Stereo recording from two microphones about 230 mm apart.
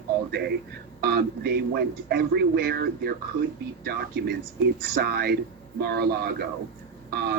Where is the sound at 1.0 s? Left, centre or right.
Right.